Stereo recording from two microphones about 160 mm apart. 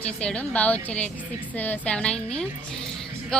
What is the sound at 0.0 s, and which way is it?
A woman's voice, 5° left (ahead or behind).